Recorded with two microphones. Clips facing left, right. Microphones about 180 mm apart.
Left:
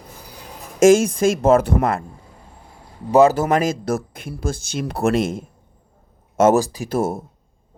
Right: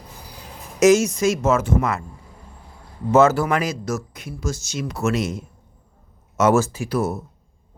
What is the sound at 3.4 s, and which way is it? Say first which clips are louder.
Speech: left 3 dB; 45° left (ahead or behind).